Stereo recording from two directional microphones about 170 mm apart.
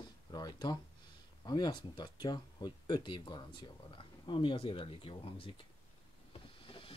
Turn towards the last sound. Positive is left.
turn(degrees=30)  # may be behind; listen again after turning